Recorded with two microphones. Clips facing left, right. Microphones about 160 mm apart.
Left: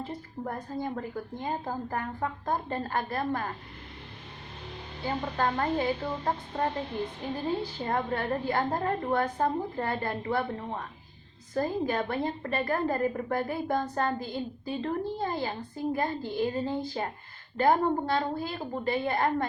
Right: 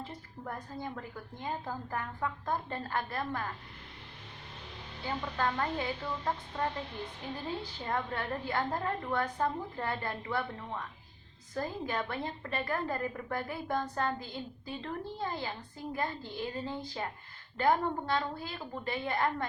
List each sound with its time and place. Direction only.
0.4 s a woman's voice: 45° left (ahead or behind)
5.0 s a woman's voice: 40° left (ahead or behind)